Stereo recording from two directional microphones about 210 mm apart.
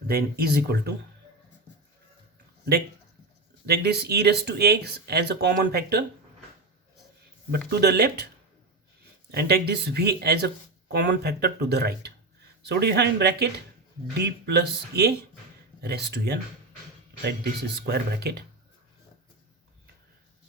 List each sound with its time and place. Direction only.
0.1 s speech: 45° right (ahead or behind)
3.7 s speech: 50° right (ahead or behind)
7.7 s speech: 50° right (ahead or behind)
9.3 s speech: 50° right (ahead or behind)
17.7 s speech: 50° right (ahead or behind)